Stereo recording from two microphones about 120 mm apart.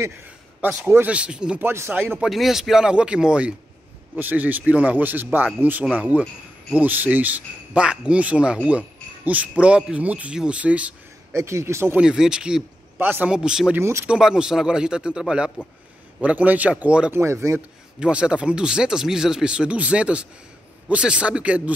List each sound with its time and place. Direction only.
0.6 s speech: 15° right (ahead or behind)
1.7 s speech: 20° right (ahead or behind)
2.1 s speech: centre (ahead or behind)
11.3 s speech: 20° right (ahead or behind)
12.0 s speech: 5° right (ahead or behind)
13.7 s speech: 20° right (ahead or behind)
14.0 s speech: 5° right (ahead or behind)
17.1 s speech: 20° right (ahead or behind)
17.6 s speech: 10° right (ahead or behind)